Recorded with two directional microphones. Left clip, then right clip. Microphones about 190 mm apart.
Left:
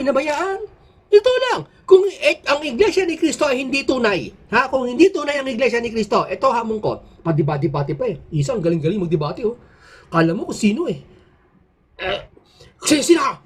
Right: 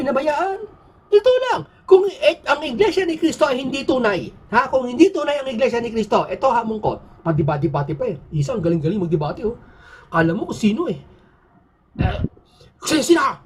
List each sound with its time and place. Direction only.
0.0 s a woman's voice: 20° left (ahead or behind)
12.8 s speech: 20° left (ahead or behind)